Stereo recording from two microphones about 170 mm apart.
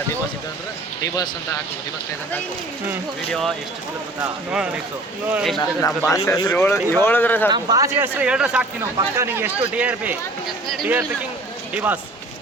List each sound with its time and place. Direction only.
4.5 s speech: 5° right (ahead or behind)
5.5 s speech: 20° left (ahead or behind)
7.5 s speech: 20° right (ahead or behind)